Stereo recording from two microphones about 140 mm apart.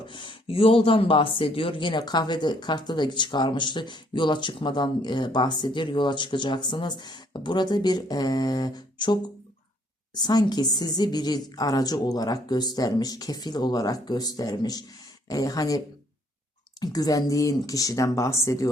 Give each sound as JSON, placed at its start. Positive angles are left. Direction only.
{"t": 0.1, "sound": "a woman's voice", "side_deg": 35}
{"t": 16.8, "sound": "a woman's voice", "side_deg": 25}